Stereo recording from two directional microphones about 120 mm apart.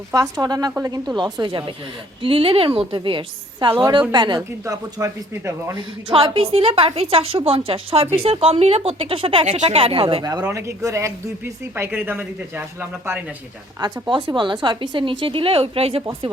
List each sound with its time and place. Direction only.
0.1 s a woman's voice: 30° right (ahead or behind)
4.4 s speech: 25° right (ahead or behind)
6.1 s a woman's voice: 50° right (ahead or behind)
10.4 s speech: 20° right (ahead or behind)
11.7 s speech: 15° right (ahead or behind)
13.7 s a woman's voice: 35° right (ahead or behind); by 16.0 s 50° right (ahead or behind)